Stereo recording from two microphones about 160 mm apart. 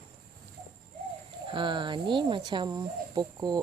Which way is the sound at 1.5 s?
30° right (ahead or behind).